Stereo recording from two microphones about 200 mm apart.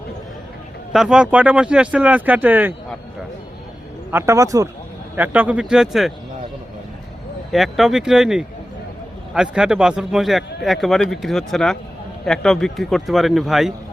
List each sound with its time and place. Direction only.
0.9 s speech: 5° right (ahead or behind)
4.1 s a man's voice: 15° right (ahead or behind)
7.5 s a man's voice: centre (ahead or behind)